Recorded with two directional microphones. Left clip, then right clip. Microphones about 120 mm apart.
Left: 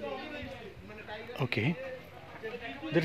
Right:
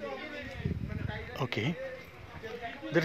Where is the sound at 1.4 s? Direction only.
35° left (ahead or behind).